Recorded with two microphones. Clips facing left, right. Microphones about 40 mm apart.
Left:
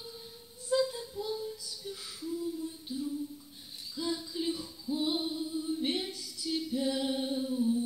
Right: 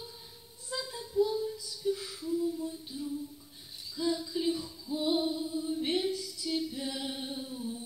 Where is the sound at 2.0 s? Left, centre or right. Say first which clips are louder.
Right 3 dB; right.